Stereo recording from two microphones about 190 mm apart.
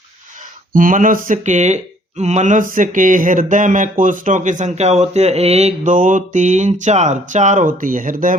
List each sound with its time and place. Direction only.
0.7 s speech: 45° right (ahead or behind)